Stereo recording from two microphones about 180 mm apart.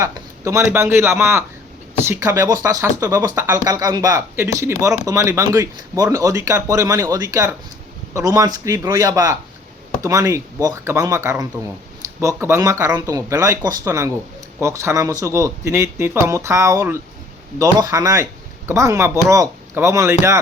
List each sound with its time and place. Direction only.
0.0 s a man's voice: 15° right (ahead or behind)